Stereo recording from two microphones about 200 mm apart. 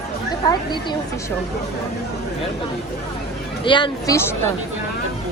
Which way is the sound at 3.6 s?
25° left (ahead or behind).